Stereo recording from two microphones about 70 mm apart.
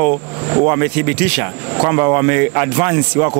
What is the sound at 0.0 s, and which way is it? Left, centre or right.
Speech, right.